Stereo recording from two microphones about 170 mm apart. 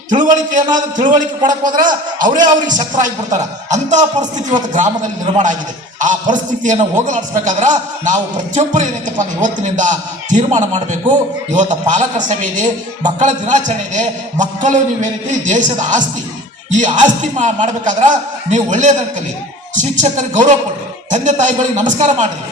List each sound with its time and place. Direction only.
0.1 s a man's voice: 50° right (ahead or behind)